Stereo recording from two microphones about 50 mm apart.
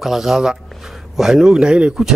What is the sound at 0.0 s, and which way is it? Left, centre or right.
Speech, centre.